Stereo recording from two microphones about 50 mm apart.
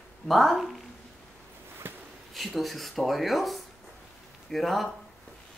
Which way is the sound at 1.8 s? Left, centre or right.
Right.